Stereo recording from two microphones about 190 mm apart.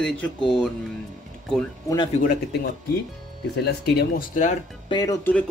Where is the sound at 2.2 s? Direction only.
45° left (ahead or behind).